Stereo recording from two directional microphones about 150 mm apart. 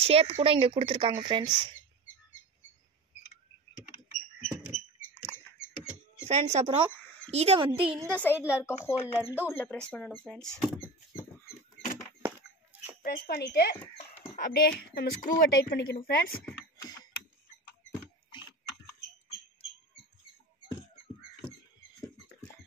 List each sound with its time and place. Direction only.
0.0 s speech: 40° right (ahead or behind)
4.1 s a sound: 55° left (ahead or behind)
6.2 s speech: 45° right (ahead or behind)
8.2 s speech: 15° left (ahead or behind)
11.4 s rodents: 70° left (ahead or behind)
13.0 s speech: 90° left
14.3 s a woman's voice: 75° left (ahead or behind)
16.7 s a sound: 25° left (ahead or behind)